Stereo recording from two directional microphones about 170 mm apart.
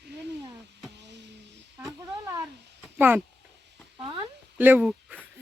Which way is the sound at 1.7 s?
20° right (ahead or behind).